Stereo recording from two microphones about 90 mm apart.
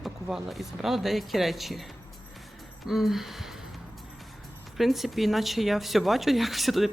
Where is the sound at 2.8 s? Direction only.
5° right (ahead or behind).